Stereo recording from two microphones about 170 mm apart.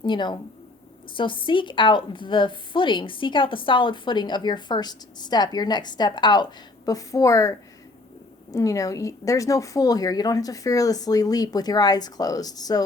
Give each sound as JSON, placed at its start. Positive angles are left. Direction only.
{"t": 0.0, "sound": "a woman's voice", "side_deg": 25}